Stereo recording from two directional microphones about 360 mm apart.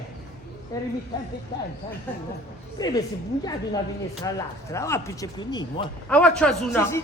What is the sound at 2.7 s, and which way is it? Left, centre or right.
Speech, centre.